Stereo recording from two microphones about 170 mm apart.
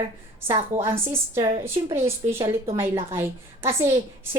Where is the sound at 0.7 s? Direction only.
15° right (ahead or behind).